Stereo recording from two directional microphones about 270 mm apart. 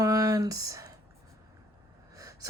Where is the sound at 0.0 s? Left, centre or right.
Centre.